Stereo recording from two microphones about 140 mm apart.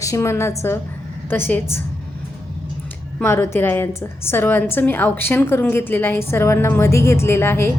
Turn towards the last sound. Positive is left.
turn(degrees=15)  # may be behind; listen again after turning